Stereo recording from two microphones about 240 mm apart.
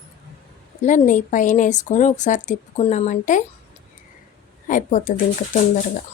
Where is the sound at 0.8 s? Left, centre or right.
Left.